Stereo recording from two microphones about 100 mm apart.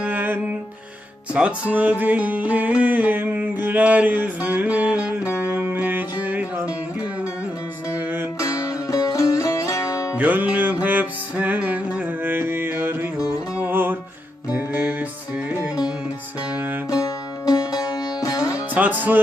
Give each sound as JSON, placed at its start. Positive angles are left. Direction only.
{"t": 0.0, "sound": "music", "side_deg": -15}
{"t": 7.9, "sound": "music", "side_deg": -20}
{"t": 8.4, "sound": "music", "side_deg": 35}
{"t": 10.2, "sound": "music", "side_deg": -15}
{"t": 16.9, "sound": "music", "side_deg": 40}
{"t": 18.7, "sound": "music", "side_deg": -15}